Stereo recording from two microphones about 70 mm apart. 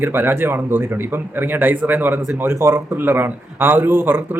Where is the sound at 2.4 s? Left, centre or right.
Right.